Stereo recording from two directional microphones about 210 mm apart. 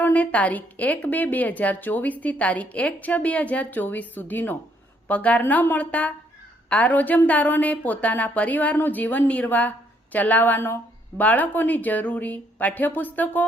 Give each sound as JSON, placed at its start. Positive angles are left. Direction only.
{"t": 0.0, "sound": "a woman's voice", "side_deg": 5}